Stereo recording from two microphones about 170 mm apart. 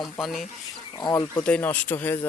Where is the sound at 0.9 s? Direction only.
25° left (ahead or behind).